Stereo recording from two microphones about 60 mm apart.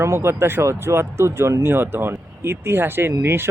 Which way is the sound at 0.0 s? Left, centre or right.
Right.